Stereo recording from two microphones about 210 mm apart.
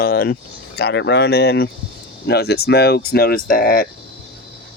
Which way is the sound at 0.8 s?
55° left (ahead or behind).